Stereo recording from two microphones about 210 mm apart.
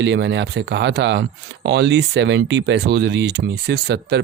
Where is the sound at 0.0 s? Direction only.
55° right (ahead or behind).